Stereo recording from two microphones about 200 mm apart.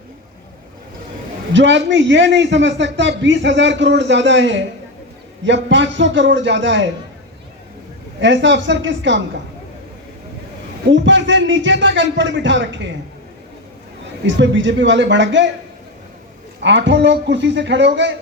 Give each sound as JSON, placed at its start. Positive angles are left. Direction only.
{"t": 1.5, "sound": "a man's voice", "side_deg": -65}
{"t": 8.2, "sound": "a man's voice", "side_deg": -65}
{"t": 10.8, "sound": "a man's voice", "side_deg": -65}
{"t": 14.3, "sound": "a man's voice", "side_deg": -65}
{"t": 16.6, "sound": "a man's voice", "side_deg": -65}